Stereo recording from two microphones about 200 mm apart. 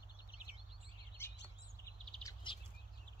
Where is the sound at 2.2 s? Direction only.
15° left (ahead or behind).